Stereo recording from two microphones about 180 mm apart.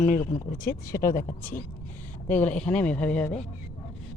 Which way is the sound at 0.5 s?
50° left (ahead or behind).